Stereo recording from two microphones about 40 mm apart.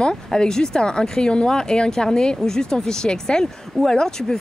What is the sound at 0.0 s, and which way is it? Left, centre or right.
Speech, centre.